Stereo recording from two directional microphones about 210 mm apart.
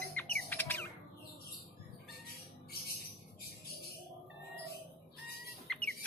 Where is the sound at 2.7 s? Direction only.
45° left (ahead or behind).